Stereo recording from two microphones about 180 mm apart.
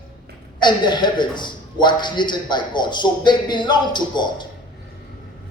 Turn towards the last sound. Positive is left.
turn(degrees=25)  # may be behind; listen again after turning